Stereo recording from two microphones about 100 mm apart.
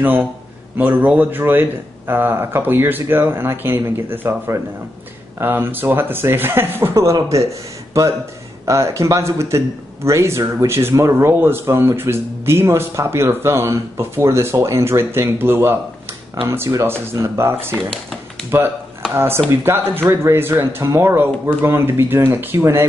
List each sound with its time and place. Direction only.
0.0 s speech: 20° right (ahead or behind)
8.6 s speech: 30° right (ahead or behind)